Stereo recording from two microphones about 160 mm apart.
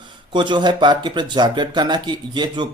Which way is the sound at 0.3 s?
30° right (ahead or behind).